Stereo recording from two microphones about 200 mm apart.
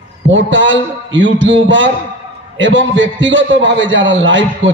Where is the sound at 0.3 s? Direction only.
65° right (ahead or behind).